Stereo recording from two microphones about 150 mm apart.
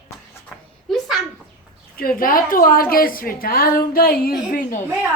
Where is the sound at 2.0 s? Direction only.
75° left (ahead or behind).